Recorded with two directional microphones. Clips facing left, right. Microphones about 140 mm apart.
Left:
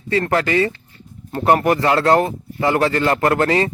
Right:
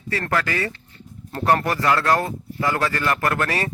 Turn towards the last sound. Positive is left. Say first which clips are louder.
# left 7 dB
turn(degrees=25)  # may be behind; listen again after turning